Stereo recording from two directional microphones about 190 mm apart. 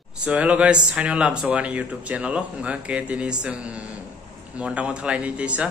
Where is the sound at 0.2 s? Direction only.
5° right (ahead or behind).